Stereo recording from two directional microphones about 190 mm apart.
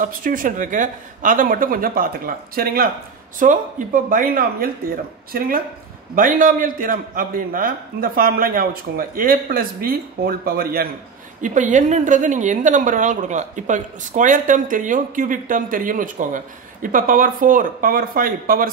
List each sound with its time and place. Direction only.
0.0 s a woman's voice: 45° right (ahead or behind)
11.4 s a woman's voice: 40° right (ahead or behind)